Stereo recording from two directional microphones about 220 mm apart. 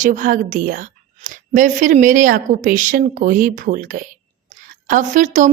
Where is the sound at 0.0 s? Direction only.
35° right (ahead or behind).